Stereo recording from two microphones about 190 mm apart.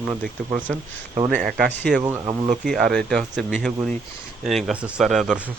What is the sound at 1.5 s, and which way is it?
Speech, centre (ahead or behind).